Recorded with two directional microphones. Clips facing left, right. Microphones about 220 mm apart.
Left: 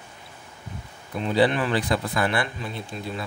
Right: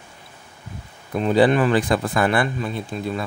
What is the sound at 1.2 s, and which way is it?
A man's voice, 45° right (ahead or behind).